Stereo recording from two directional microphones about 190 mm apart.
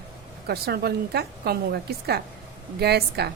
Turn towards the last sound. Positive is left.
turn(degrees=-60)  # may be behind; listen again after turning